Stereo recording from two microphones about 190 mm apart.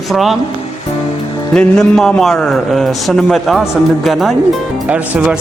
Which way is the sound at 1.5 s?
5° left (ahead or behind).